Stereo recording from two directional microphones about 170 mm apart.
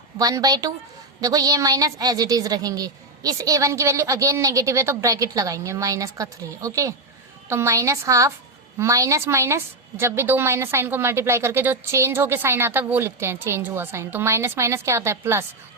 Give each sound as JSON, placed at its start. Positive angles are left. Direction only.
{"t": 0.2, "sound": "a woman's voice", "side_deg": -20}